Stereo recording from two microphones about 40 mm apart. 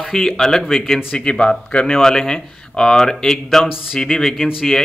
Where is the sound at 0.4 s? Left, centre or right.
Centre.